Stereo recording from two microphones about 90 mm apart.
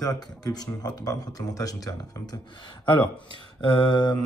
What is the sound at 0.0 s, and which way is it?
Speech, 45° left (ahead or behind).